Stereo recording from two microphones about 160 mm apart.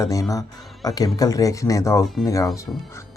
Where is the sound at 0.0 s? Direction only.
20° left (ahead or behind).